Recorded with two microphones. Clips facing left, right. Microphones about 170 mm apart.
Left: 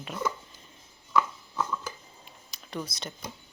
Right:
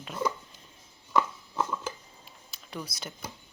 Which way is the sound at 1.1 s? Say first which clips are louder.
Even; 25° right (ahead or behind).